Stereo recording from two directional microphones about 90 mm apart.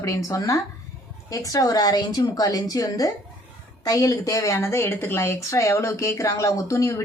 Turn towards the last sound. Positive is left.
turn(degrees=35)  # may be behind; listen again after turning